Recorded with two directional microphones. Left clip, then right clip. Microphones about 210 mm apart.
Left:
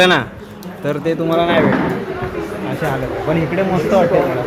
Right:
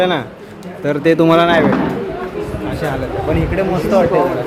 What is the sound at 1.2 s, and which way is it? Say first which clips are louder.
Speech: right 3 dB; 50° right (ahead or behind).